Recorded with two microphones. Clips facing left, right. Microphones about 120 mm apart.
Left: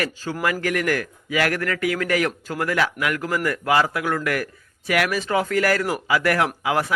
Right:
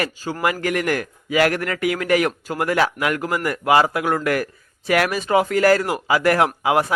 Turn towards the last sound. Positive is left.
turn(degrees=-25)  # may be behind; listen again after turning